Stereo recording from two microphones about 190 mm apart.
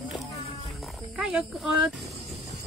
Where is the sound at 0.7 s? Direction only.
Centre (ahead or behind).